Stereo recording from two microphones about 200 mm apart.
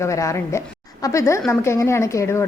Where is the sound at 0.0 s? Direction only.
15° left (ahead or behind).